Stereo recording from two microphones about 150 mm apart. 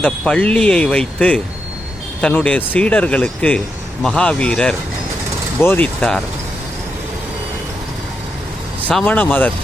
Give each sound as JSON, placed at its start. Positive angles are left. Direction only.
{"t": 0.0, "sound": "speech", "side_deg": 10}
{"t": 8.9, "sound": "speech", "side_deg": 10}